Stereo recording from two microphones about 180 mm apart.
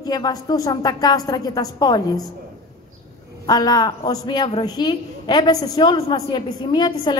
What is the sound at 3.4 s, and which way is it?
A woman's voice, 20° left (ahead or behind).